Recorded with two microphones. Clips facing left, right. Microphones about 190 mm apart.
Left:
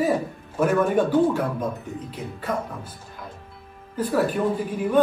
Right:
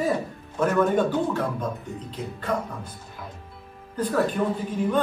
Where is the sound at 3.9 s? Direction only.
5° left (ahead or behind).